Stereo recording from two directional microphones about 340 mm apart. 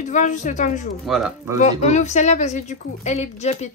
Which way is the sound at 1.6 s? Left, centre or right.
Centre.